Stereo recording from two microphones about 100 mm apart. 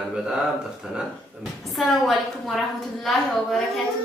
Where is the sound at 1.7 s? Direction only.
Centre (ahead or behind).